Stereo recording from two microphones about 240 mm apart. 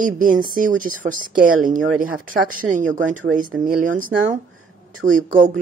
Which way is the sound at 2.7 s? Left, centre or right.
Right.